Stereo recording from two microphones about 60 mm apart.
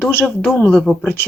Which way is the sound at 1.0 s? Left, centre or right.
Left.